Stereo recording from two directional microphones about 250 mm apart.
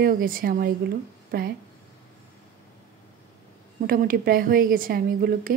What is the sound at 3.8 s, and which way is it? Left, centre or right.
Speech, right.